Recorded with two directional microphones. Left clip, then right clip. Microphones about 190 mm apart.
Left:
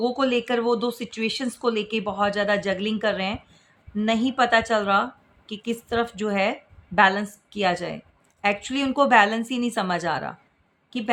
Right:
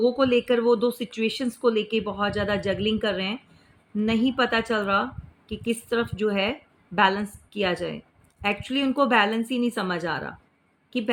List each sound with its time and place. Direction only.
0.0 s speech: 20° left (ahead or behind)